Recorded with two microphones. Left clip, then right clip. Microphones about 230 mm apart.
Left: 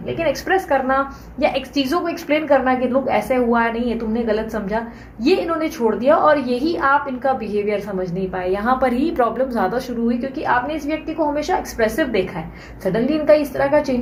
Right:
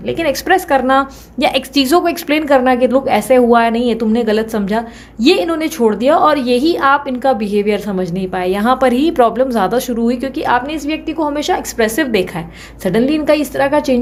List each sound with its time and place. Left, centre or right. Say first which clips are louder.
0.1 s a woman's voice: right 5 dB; right